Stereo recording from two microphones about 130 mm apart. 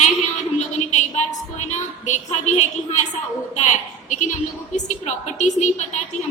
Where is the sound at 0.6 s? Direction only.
60° left (ahead or behind).